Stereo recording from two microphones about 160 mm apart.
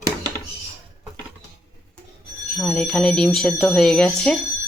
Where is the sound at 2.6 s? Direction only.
5° left (ahead or behind).